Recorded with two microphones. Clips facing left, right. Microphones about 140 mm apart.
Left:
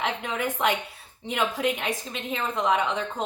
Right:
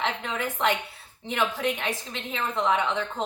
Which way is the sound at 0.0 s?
15° left (ahead or behind).